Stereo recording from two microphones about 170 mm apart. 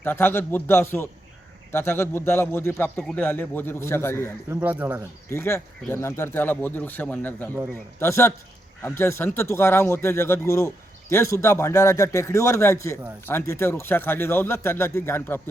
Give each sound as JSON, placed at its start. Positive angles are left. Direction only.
{"t": 0.0, "sound": "a man's voice", "side_deg": 10}
{"t": 4.4, "sound": "speech", "side_deg": -10}
{"t": 5.3, "sound": "a man's voice", "side_deg": 15}